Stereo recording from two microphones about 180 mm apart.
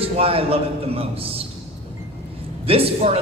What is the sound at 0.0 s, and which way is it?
A man's voice, 30° right (ahead or behind).